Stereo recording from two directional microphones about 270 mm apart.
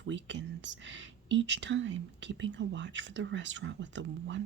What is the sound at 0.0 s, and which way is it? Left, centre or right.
Speech, right.